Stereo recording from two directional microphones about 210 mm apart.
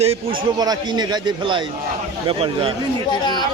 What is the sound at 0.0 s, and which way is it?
Speech, 25° right (ahead or behind).